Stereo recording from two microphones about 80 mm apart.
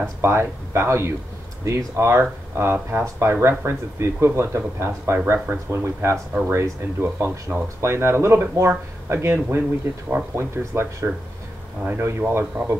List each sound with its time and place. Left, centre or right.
0.2 s speech: right